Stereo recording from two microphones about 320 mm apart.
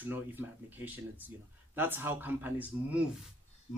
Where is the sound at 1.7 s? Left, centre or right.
Centre.